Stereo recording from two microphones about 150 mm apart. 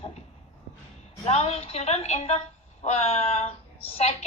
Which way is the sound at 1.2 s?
45° left (ahead or behind).